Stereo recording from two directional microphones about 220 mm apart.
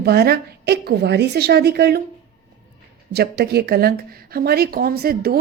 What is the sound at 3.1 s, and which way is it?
Speech, 45° right (ahead or behind).